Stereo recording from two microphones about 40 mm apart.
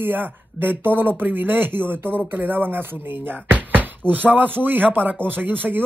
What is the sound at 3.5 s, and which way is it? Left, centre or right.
Speech, right.